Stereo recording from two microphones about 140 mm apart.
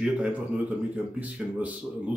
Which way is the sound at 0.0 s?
10° right (ahead or behind).